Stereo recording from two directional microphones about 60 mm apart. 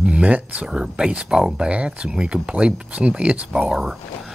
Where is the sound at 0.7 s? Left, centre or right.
Centre.